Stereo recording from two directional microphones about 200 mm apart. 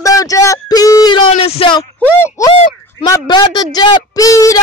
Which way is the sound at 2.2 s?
15° left (ahead or behind).